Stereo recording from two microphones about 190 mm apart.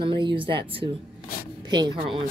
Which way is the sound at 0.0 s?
25° right (ahead or behind).